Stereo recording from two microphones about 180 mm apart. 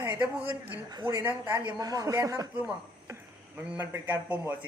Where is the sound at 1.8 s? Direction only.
20° right (ahead or behind).